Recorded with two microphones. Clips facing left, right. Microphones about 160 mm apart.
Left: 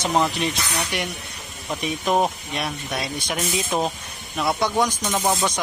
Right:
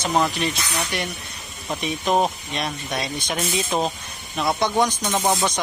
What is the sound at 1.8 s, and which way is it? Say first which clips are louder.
Speech: even; 5° left (ahead or behind).